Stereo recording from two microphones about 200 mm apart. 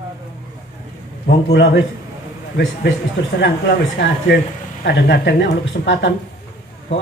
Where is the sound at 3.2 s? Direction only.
60° left (ahead or behind).